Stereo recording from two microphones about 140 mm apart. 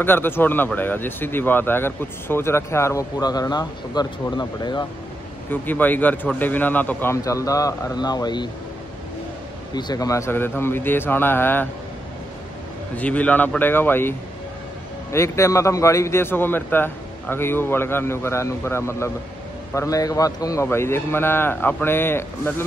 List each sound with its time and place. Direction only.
0.0 s a man's voice: 15° left (ahead or behind); by 4.8 s 30° left (ahead or behind)
5.5 s a man's voice: 15° left (ahead or behind); by 8.5 s 30° left (ahead or behind)
9.8 s a man's voice: 30° left (ahead or behind)
12.9 s a man's voice: 10° left (ahead or behind)